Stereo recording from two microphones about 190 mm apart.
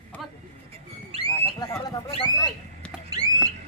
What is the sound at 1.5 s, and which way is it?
Speech, 25° left (ahead or behind).